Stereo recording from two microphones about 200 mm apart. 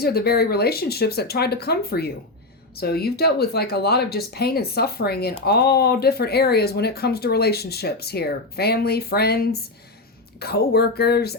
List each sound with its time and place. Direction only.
0.0 s speech: 50° left (ahead or behind)